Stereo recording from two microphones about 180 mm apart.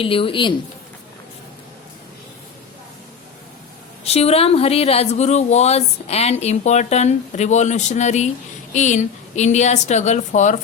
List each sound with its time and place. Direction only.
0.0 s a woman's voice: 30° left (ahead or behind)
4.0 s speech: 35° left (ahead or behind)